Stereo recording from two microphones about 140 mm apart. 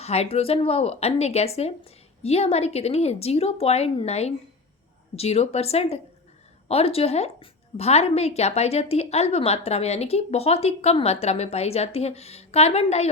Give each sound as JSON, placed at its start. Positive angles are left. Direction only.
{"t": 0.0, "sound": "a woman's voice", "side_deg": 50}